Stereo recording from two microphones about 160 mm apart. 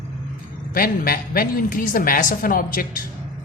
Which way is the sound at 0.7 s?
65° left (ahead or behind).